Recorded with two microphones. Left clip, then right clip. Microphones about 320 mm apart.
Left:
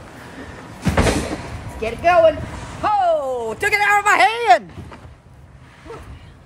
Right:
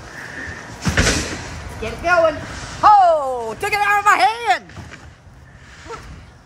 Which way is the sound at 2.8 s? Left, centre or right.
Centre.